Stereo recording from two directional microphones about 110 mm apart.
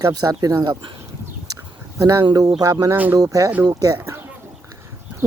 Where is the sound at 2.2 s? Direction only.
35° right (ahead or behind).